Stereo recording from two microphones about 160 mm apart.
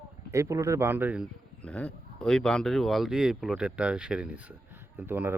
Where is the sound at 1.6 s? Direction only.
10° left (ahead or behind).